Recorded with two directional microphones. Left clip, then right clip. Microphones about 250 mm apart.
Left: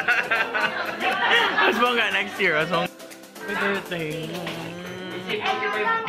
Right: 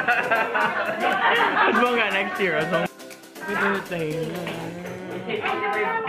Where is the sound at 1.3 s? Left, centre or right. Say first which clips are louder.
Left 2 dB; centre.